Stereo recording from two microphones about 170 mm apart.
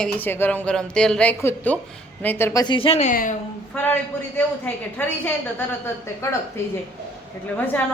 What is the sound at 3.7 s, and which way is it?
Speech, 10° left (ahead or behind).